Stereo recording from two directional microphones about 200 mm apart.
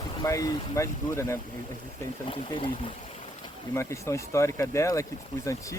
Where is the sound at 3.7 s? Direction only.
15° left (ahead or behind).